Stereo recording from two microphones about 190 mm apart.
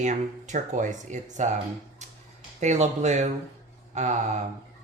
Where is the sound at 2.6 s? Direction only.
35° right (ahead or behind).